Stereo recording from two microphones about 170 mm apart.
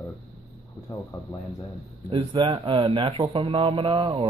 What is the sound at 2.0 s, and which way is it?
Speech, 30° right (ahead or behind).